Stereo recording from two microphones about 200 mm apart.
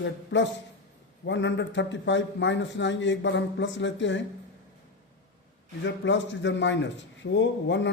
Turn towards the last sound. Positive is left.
turn(degrees=65)  # may be behind; listen again after turning